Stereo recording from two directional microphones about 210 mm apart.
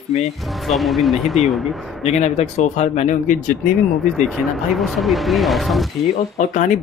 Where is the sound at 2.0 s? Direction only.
30° left (ahead or behind).